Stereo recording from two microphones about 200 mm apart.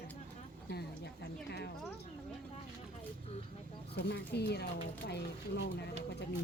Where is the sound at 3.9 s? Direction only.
55° left (ahead or behind).